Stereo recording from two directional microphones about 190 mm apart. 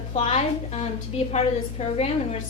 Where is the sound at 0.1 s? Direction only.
30° left (ahead or behind).